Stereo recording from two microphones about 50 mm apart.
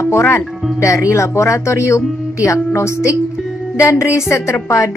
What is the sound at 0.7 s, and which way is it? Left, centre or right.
Speech, left.